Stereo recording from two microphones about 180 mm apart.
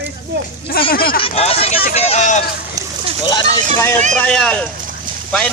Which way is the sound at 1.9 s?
35° left (ahead or behind).